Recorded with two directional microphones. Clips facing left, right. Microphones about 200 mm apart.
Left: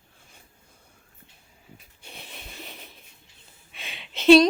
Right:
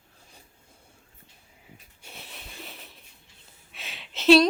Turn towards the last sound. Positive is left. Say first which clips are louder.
# left 3 dB
turn(degrees=0)  # may be behind; listen again after turning